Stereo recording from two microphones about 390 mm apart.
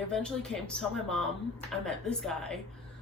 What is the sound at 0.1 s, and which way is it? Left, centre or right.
A woman's voice, centre.